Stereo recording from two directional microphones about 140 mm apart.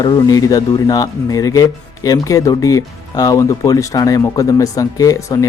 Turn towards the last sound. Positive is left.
turn(degrees=25)  # may be behind; listen again after turning